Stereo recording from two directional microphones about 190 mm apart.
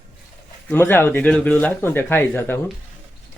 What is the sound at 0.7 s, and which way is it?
Speech, 10° left (ahead or behind).